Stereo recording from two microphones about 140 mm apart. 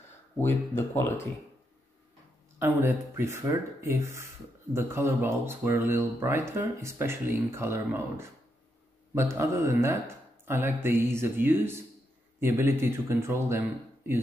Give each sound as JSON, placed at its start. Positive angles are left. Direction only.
{"t": 0.4, "sound": "speech", "side_deg": 15}
{"t": 2.6, "sound": "speech", "side_deg": -15}